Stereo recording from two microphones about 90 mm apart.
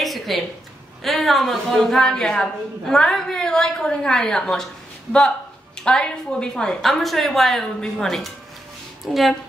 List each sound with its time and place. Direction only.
0.0 s a sound: centre (ahead or behind)
1.0 s a woman's voice: centre (ahead or behind)
5.8 s a woman's voice: 10° left (ahead or behind)